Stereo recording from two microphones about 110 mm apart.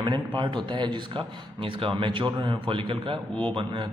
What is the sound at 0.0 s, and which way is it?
A man's voice, 45° right (ahead or behind).